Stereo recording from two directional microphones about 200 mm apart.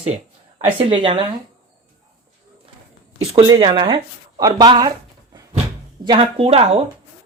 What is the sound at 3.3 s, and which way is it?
Speech, 20° right (ahead or behind).